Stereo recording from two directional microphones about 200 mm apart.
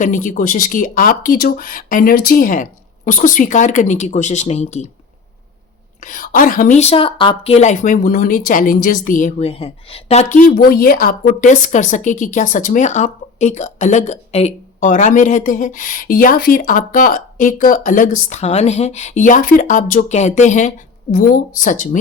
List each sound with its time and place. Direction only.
0.0 s speech: 40° left (ahead or behind)
6.0 s speech: 40° left (ahead or behind)
10.5 s speech: 50° left (ahead or behind)